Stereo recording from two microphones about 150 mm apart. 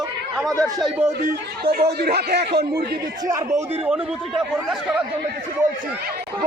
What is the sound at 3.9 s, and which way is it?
Speech, centre (ahead or behind).